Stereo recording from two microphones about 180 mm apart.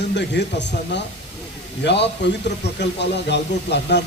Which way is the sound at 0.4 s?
70° left (ahead or behind).